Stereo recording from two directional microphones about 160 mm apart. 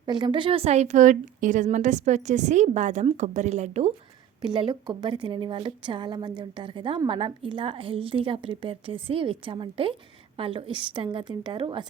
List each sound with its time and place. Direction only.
0.0 s a woman's voice: 30° right (ahead or behind); by 3.9 s 45° right (ahead or behind)
4.4 s a woman's voice: 30° right (ahead or behind)